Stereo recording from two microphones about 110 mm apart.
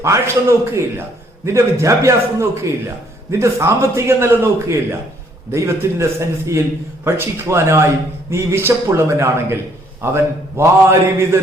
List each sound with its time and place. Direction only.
0.0 s a man's voice: 25° right (ahead or behind)